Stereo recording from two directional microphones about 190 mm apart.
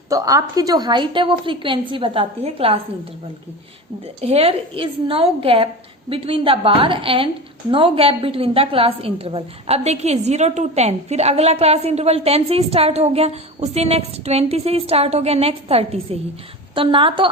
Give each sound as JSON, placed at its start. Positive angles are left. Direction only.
{"t": 0.1, "sound": "a woman's voice", "side_deg": -20}
{"t": 4.0, "sound": "a woman's voice", "side_deg": -30}